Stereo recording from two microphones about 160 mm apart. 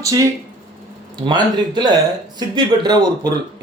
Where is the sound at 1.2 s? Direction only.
25° right (ahead or behind).